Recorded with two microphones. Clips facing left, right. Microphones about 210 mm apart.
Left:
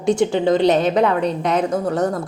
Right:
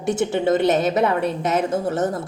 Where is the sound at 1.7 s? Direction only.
20° right (ahead or behind).